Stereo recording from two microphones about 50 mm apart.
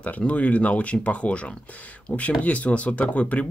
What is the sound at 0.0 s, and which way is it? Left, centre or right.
Speech, left.